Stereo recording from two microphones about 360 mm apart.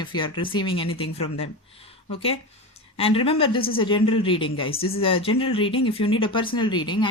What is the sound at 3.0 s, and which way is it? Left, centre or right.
A woman's voice, centre.